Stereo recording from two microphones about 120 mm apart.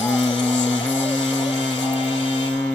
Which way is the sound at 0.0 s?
40° left (ahead or behind).